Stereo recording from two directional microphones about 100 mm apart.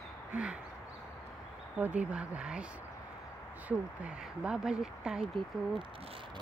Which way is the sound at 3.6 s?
10° right (ahead or behind).